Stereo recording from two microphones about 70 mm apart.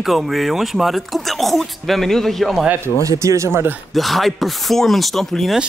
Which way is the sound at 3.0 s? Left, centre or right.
Right.